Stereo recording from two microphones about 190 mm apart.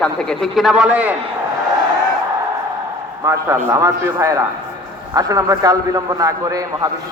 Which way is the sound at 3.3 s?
15° right (ahead or behind).